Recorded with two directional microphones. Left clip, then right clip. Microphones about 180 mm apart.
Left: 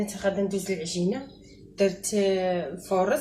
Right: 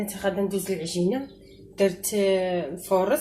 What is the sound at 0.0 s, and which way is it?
Speech, 40° right (ahead or behind).